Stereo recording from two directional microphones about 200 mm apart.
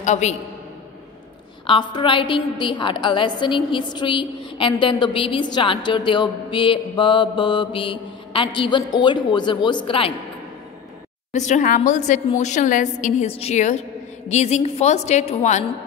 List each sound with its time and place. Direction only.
0.0 s a woman's voice: 35° left (ahead or behind)
1.7 s a woman's voice: 20° left (ahead or behind)
11.3 s a woman's voice: 35° left (ahead or behind)